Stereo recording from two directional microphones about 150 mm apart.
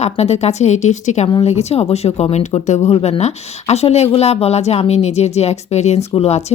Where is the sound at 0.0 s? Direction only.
45° left (ahead or behind).